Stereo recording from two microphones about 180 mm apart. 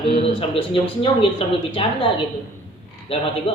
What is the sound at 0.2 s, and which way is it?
Speech, 30° left (ahead or behind).